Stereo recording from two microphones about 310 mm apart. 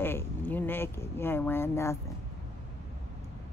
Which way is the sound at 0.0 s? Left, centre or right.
Centre.